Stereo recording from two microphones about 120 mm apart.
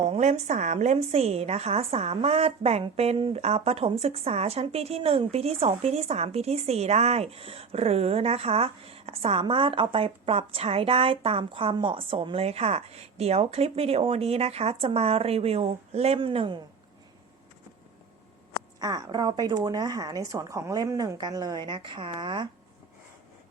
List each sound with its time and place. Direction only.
0.1 s speech: 70° right (ahead or behind); by 16.6 s 50° right (ahead or behind)
18.8 s speech: 30° right (ahead or behind)